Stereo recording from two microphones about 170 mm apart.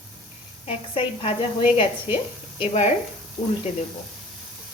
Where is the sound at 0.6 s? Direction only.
35° left (ahead or behind).